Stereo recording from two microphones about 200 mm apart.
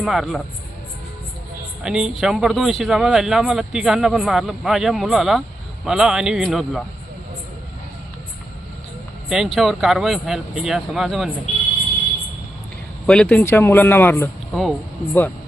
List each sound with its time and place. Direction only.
0.0 s speech: centre (ahead or behind)
1.8 s speech: 5° right (ahead or behind)
9.3 s speech: centre (ahead or behind)
13.1 s speech: 5° left (ahead or behind)